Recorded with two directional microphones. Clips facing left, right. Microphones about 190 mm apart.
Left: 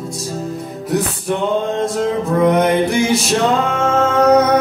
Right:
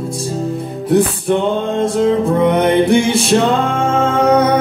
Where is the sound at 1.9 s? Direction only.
30° right (ahead or behind).